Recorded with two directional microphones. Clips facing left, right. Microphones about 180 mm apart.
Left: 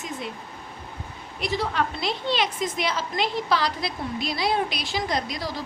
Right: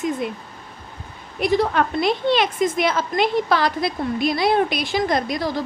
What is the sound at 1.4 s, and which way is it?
A woman's voice, 55° right (ahead or behind).